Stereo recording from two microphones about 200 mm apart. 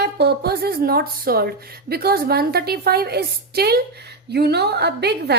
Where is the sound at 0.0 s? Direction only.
55° right (ahead or behind).